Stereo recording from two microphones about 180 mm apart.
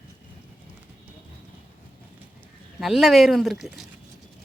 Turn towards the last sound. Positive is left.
turn(degrees=0)  # may be behind; listen again after turning